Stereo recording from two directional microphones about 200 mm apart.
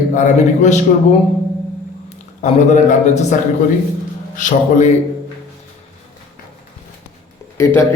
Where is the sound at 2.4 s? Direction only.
40° left (ahead or behind).